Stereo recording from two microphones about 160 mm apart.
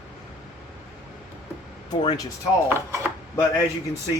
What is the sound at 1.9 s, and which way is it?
Speech, 25° left (ahead or behind).